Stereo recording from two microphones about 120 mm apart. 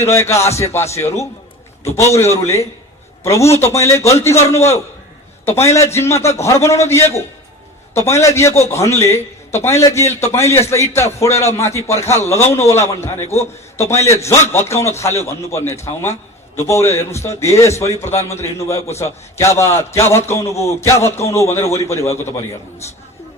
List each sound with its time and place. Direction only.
0.0 s a man's voice: 20° left (ahead or behind)
2.3 s a man's voice: 25° left (ahead or behind)
8.2 s a man's voice: 25° left (ahead or behind)